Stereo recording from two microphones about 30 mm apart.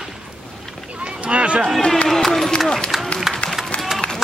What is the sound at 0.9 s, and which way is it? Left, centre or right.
Run, right.